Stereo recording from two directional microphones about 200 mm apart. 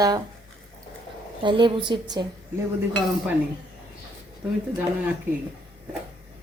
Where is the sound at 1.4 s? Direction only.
25° right (ahead or behind).